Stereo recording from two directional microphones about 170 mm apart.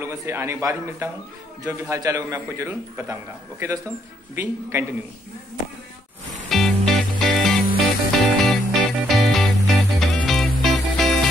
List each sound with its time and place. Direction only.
0.0 s a man's voice: 15° right (ahead or behind)
6.5 s music: centre (ahead or behind)